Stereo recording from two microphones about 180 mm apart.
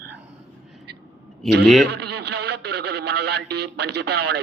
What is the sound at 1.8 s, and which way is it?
Speech, 65° right (ahead or behind).